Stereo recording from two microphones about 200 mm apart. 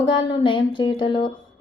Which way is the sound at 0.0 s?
25° left (ahead or behind).